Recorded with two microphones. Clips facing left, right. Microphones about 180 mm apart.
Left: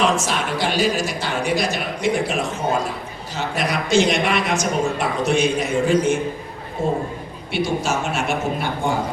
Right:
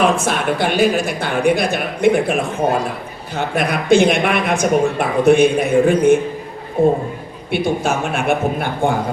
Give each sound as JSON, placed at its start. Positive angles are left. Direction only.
{"t": 0.0, "sound": "speech", "side_deg": -55}